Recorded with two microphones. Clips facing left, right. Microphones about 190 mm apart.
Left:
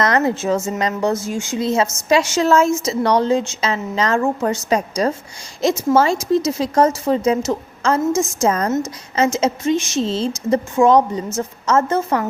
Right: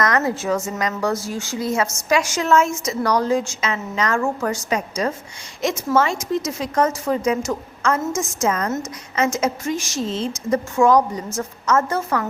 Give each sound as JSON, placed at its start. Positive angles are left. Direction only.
{"t": 0.0, "sound": "a woman's voice", "side_deg": 30}
{"t": 8.1, "sound": "a woman's voice", "side_deg": 10}
{"t": 8.4, "sound": "a woman's voice", "side_deg": 35}
{"t": 10.1, "sound": "a woman's voice", "side_deg": 30}